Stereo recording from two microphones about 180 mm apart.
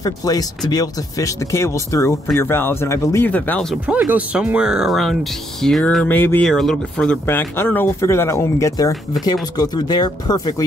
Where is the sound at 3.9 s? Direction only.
5° right (ahead or behind).